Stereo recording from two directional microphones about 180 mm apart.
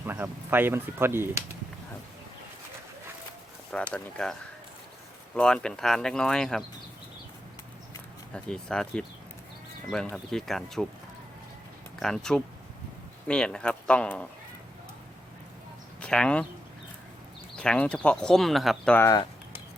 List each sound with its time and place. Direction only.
0.0 s speech: 10° right (ahead or behind)
3.9 s speech: 5° left (ahead or behind)
8.3 s speech: 5° left (ahead or behind)
11.9 s speech: centre (ahead or behind)
16.0 s speech: 5° left (ahead or behind)
17.6 s speech: 5° left (ahead or behind)
18.9 s a sound: 20° left (ahead or behind)